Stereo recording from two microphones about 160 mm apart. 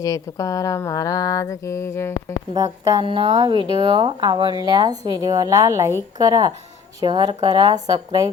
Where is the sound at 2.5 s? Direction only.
25° right (ahead or behind).